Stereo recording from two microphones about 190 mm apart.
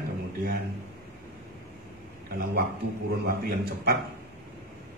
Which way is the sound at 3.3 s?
55° right (ahead or behind).